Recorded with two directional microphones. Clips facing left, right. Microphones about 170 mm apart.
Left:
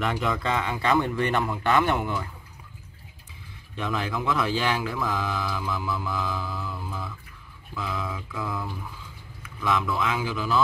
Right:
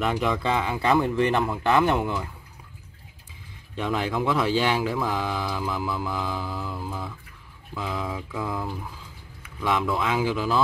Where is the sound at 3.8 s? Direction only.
15° right (ahead or behind).